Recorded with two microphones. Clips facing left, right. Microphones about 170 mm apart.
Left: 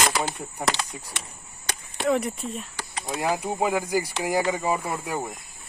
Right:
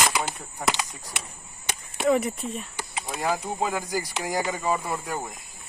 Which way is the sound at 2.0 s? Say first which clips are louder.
Right 1 dB; centre (ahead or behind).